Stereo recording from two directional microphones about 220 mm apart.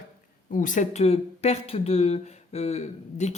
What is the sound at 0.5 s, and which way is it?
Speech, 35° left (ahead or behind).